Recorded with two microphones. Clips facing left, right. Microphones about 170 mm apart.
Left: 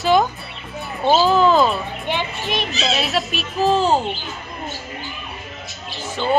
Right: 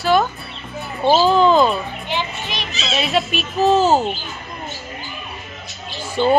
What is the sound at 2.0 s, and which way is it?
Children playing, 55° left (ahead or behind).